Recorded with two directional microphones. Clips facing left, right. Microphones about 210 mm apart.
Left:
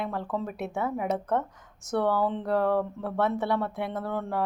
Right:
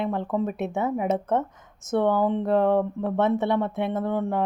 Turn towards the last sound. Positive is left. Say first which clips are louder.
# right 5 dB
turn(degrees=-20)  # may be behind; listen again after turning